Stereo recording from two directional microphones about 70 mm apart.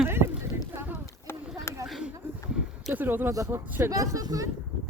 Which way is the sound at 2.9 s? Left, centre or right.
Right.